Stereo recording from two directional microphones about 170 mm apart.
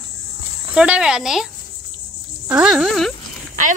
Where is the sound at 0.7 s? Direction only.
5° right (ahead or behind).